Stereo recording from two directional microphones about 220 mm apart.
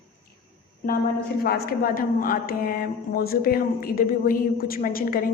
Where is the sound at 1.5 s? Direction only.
45° left (ahead or behind).